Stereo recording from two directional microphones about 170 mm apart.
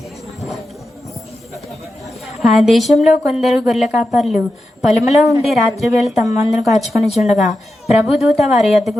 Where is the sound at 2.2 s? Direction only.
Centre (ahead or behind).